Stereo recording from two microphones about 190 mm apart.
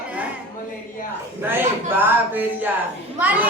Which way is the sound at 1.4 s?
10° right (ahead or behind).